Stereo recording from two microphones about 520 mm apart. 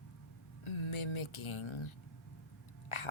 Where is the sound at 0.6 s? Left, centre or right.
Left.